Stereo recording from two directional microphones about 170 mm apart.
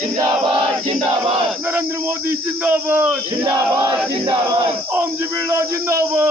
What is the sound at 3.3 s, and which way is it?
Battle cry, 25° right (ahead or behind).